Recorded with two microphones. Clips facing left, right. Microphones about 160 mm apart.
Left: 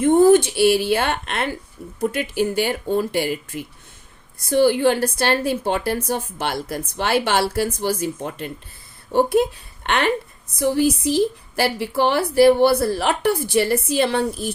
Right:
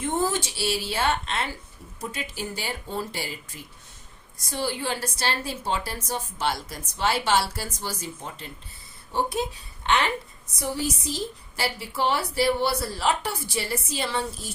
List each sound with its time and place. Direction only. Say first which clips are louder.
0.0 s a woman's voice: left 13 dB; 55° left (ahead or behind)